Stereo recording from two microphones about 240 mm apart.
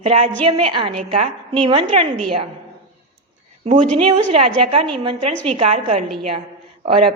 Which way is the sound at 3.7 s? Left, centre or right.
Right.